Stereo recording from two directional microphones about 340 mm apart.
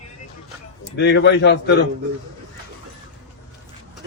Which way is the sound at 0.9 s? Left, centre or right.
Left.